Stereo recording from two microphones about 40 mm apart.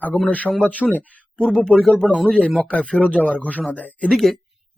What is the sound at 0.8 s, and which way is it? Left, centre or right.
Speech, centre.